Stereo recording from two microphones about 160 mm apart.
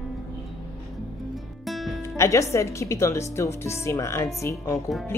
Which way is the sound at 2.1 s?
20° left (ahead or behind).